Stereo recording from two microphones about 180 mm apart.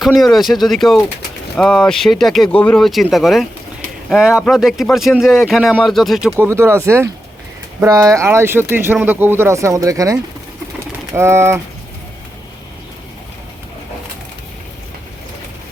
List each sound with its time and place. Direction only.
0.0 s speech: centre (ahead or behind)
6.5 s speech: 15° right (ahead or behind)